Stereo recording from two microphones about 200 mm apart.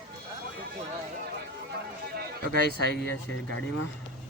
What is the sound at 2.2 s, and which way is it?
Speech, 50° right (ahead or behind).